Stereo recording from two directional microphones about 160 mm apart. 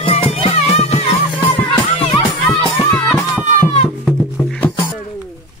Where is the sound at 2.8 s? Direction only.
10° left (ahead or behind).